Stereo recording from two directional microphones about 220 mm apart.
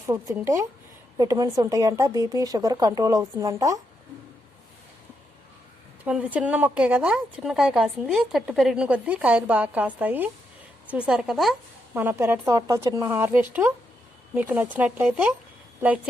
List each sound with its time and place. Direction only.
0.0 s a woman's voice: 15° right (ahead or behind)
6.1 s a woman's voice: 5° right (ahead or behind)